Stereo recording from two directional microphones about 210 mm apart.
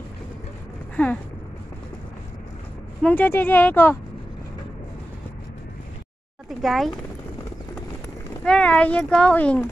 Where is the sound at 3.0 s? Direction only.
10° left (ahead or behind).